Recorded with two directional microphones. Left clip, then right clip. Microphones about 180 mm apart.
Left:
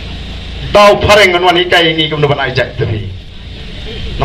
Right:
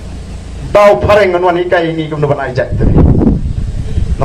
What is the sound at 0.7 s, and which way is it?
A man's voice, 40° right (ahead or behind).